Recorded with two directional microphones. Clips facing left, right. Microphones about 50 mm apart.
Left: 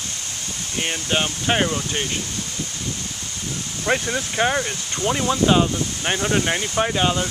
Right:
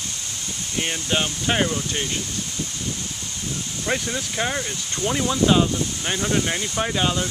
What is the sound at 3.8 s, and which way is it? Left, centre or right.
Speech, left.